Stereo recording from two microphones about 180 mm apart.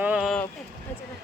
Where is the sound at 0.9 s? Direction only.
10° left (ahead or behind).